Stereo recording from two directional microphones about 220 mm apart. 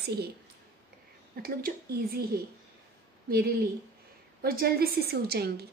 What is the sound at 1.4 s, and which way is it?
A woman's voice, 40° right (ahead or behind).